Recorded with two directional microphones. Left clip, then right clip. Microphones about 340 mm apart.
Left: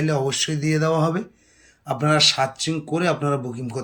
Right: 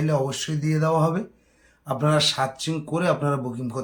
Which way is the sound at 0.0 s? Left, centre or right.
Centre.